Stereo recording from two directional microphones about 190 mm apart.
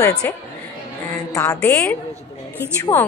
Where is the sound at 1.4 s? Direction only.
10° left (ahead or behind).